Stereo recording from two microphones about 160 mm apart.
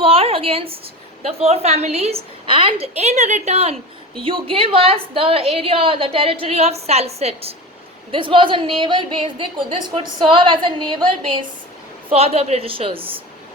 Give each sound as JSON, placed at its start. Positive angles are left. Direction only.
{"t": 0.0, "sound": "a sound", "side_deg": -35}
{"t": 1.2, "sound": "a woman's voice", "side_deg": -40}
{"t": 12.0, "sound": "a woman's voice", "side_deg": -40}